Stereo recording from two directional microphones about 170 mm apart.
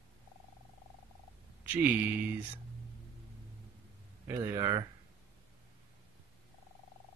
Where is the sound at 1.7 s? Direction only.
10° right (ahead or behind).